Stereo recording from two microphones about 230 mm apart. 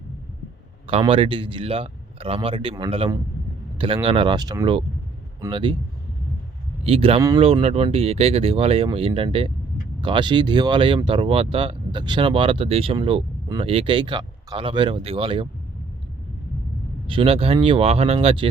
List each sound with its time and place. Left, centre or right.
0.9 s speech: right
6.8 s speech: right
17.1 s speech: right